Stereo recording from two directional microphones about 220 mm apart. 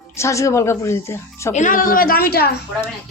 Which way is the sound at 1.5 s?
35° left (ahead or behind).